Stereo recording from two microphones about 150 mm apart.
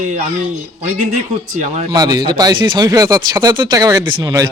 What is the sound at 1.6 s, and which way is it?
Speech, 50° right (ahead or behind).